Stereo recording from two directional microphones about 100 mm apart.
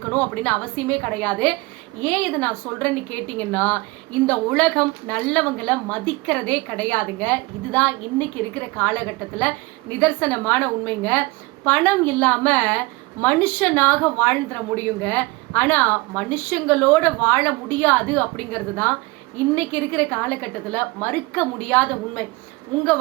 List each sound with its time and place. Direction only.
0.1 s a woman's voice: 15° left (ahead or behind)
10.0 s a woman's voice: 20° left (ahead or behind)